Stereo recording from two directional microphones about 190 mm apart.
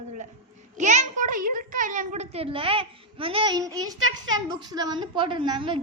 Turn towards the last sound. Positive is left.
turn(degrees=-25)  # may be behind; listen again after turning